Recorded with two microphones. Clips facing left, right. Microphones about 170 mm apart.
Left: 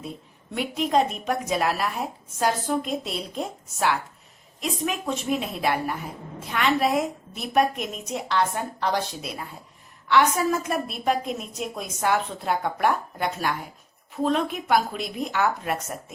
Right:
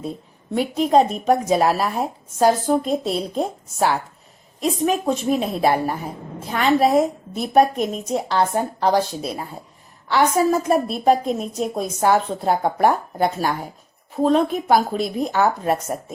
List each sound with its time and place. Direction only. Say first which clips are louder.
0.5 s a woman's voice: right 6 dB; 35° right (ahead or behind)